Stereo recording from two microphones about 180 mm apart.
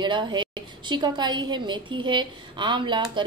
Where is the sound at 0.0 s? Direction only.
25° right (ahead or behind).